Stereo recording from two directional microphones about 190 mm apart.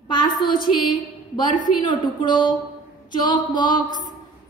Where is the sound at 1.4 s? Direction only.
45° left (ahead or behind).